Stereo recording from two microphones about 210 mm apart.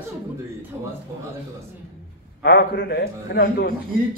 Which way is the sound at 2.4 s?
50° left (ahead or behind).